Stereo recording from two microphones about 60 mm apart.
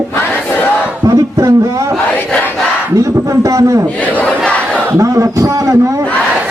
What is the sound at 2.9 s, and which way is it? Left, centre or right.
Speech, right.